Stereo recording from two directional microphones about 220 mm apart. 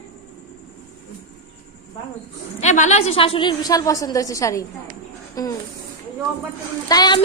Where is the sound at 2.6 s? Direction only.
30° left (ahead or behind); by 5.5 s 15° left (ahead or behind).